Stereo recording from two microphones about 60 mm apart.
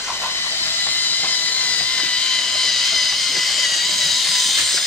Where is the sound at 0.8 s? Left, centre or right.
Left.